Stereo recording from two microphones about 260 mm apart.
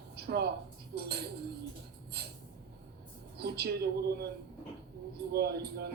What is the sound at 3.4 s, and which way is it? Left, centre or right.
Speech, right.